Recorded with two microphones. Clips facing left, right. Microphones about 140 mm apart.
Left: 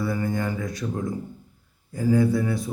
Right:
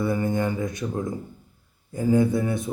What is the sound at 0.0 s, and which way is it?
Speech, 20° right (ahead or behind).